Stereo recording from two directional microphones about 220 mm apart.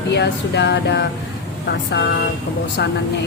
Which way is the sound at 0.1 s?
50° left (ahead or behind).